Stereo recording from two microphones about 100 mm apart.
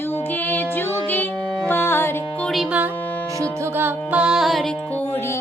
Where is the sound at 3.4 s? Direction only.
20° right (ahead or behind); by 4.7 s centre (ahead or behind).